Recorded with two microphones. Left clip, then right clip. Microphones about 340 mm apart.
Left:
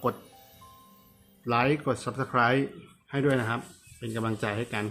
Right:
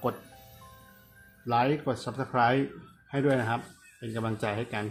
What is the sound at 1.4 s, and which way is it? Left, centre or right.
Speech, centre.